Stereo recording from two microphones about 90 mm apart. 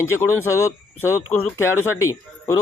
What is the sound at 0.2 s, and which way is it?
Speech, 30° left (ahead or behind).